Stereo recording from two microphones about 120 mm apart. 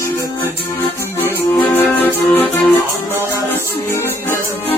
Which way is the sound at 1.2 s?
15° left (ahead or behind).